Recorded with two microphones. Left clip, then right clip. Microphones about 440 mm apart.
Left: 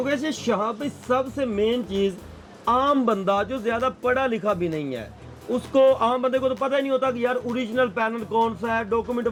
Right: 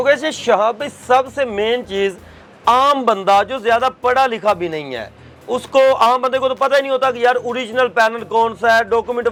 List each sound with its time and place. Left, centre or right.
0.0 s speech: right
2.6 s a man's voice: centre
3.1 s speech: right